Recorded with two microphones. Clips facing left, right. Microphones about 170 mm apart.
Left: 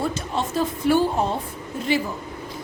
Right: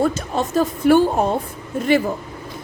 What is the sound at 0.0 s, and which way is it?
A woman's voice, 45° right (ahead or behind).